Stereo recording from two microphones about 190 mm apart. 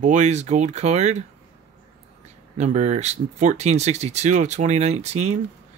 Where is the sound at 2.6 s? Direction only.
35° right (ahead or behind).